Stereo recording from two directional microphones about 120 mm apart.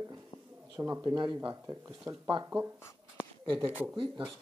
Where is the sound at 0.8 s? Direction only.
30° right (ahead or behind).